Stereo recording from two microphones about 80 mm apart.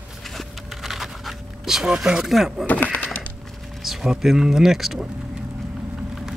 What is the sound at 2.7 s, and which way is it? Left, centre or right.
Speech, left.